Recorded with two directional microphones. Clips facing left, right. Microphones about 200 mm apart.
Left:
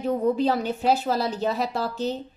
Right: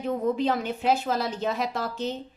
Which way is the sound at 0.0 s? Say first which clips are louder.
Left 3 dB; 35° left (ahead or behind).